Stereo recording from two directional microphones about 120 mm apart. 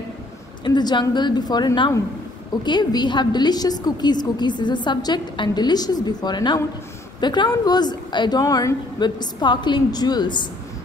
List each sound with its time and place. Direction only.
0.7 s a woman's voice: 40° left (ahead or behind)